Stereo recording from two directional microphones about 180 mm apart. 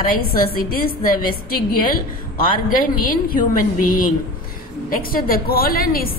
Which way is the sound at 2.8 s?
50° left (ahead or behind).